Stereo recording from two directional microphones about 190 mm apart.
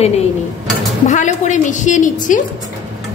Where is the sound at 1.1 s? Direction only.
40° left (ahead or behind).